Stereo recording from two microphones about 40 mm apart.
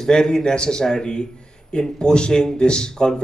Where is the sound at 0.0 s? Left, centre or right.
Centre.